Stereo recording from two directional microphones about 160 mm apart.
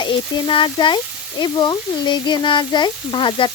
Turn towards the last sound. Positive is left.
turn(degrees=30)  # may be behind; listen again after turning